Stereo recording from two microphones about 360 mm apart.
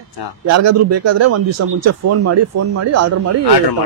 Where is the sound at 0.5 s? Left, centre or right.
Right.